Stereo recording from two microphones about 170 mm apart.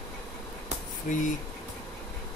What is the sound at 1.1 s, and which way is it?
Speech, 45° left (ahead or behind).